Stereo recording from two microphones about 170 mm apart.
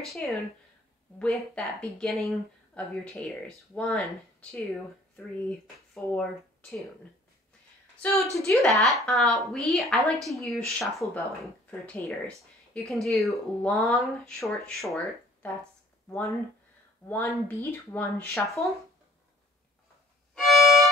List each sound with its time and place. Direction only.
0.0 s a woman's voice: centre (ahead or behind)
5.9 s speech: 5° left (ahead or behind)
8.0 s a woman's voice: centre (ahead or behind)
16.1 s speech: 15° left (ahead or behind)
20.3 s violin: centre (ahead or behind)